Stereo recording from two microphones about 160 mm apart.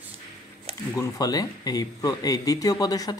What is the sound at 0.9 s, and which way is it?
Speech, 20° left (ahead or behind).